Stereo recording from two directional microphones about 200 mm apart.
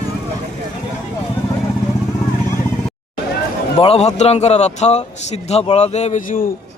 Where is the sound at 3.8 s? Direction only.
30° left (ahead or behind).